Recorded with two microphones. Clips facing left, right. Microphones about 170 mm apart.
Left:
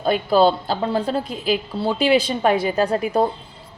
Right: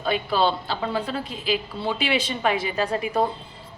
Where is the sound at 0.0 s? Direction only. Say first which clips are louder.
Left 6 dB; 40° left (ahead or behind).